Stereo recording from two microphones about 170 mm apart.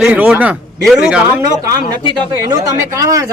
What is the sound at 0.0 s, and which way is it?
A man's voice, 10° right (ahead or behind).